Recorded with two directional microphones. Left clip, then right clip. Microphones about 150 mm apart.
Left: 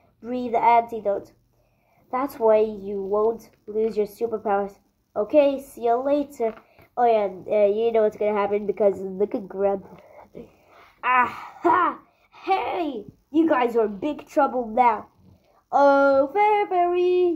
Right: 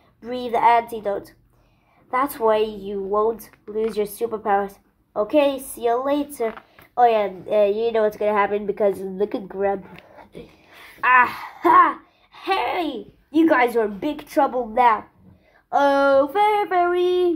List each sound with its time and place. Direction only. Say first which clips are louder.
0.2 s a woman's voice: right 2 dB; 45° left (ahead or behind)
11.1 s a sound: right 5 dB; 40° left (ahead or behind)
14.5 s speech: right 2 dB; 35° left (ahead or behind)
15.7 s speech: even; 45° left (ahead or behind); by 17.3 s 30° left (ahead or behind)